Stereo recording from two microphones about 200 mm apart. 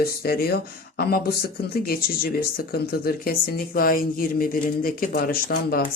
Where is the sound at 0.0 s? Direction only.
50° left (ahead or behind).